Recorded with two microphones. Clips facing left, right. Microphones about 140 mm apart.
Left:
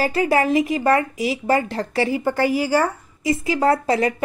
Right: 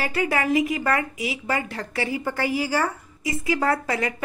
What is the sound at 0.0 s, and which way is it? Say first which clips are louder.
A woman's voice: left 6 dB; 30° left (ahead or behind).